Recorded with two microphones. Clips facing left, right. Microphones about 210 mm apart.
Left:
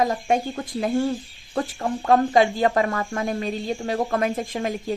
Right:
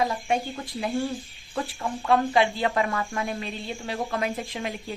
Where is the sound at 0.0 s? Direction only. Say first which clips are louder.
Left 4 dB; 45° left (ahead or behind).